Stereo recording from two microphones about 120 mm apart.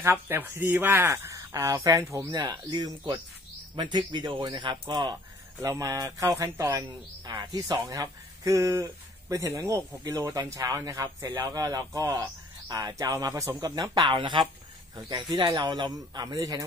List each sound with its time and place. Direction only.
0.0 s speech: 20° right (ahead or behind)
3.7 s speech: 45° right (ahead or behind)
5.6 s speech: 30° right (ahead or behind)